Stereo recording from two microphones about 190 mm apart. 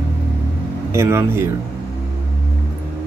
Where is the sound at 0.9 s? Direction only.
15° right (ahead or behind).